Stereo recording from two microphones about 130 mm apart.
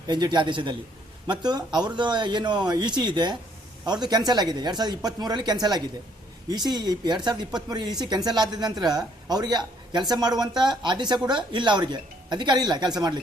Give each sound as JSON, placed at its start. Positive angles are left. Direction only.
{"t": 0.1, "sound": "speech", "side_deg": -35}